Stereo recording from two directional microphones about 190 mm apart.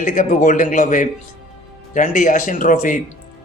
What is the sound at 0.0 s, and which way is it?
A man's voice, 45° left (ahead or behind).